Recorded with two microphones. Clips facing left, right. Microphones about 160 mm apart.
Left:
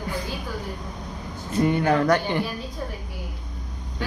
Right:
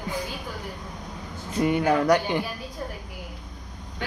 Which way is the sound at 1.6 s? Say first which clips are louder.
Left 1 dB; 10° right (ahead or behind).